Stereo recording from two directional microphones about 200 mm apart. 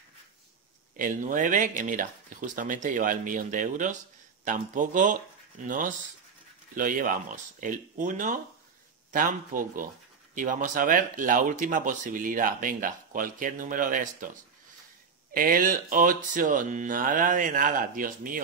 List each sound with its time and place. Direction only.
0.9 s speech: 40° right (ahead or behind)
15.3 s speech: 45° right (ahead or behind)